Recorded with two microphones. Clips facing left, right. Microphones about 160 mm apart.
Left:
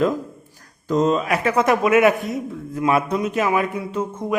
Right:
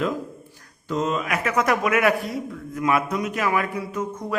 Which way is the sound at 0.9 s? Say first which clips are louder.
Left 6 dB; 35° left (ahead or behind).